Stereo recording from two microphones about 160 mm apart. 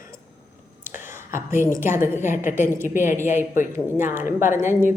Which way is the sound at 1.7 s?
15° right (ahead or behind).